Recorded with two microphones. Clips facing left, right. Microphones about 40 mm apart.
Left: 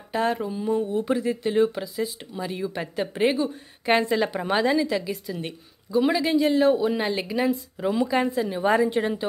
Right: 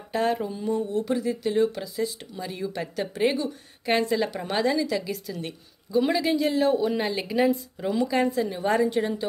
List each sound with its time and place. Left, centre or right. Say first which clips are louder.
0.1 s a woman's voice: left 1 dB; centre
7.9 s speech: even; centre